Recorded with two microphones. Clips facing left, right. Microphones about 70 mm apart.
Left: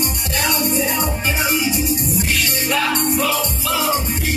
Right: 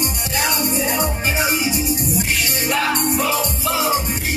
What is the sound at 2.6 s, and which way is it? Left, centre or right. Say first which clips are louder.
Music: even; centre.